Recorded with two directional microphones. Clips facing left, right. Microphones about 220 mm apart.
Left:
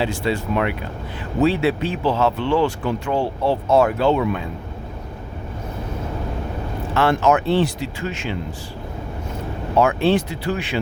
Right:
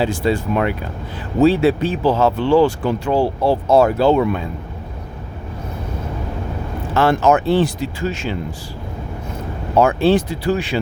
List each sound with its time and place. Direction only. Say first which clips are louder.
0.0 s speech: right 4 dB; 40° right (ahead or behind)
6.9 s speech: right 3 dB; 40° right (ahead or behind)
9.8 s speech: right 3 dB; 35° right (ahead or behind)